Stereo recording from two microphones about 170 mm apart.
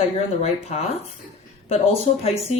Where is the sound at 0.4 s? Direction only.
40° left (ahead or behind).